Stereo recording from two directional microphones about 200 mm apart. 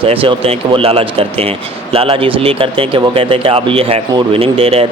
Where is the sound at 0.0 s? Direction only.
25° right (ahead or behind).